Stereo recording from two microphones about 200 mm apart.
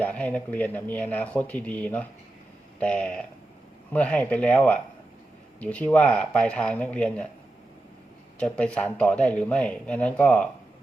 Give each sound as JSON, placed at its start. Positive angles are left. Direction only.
{"t": 0.0, "sound": "speech", "side_deg": 5}
{"t": 8.4, "sound": "speech", "side_deg": 5}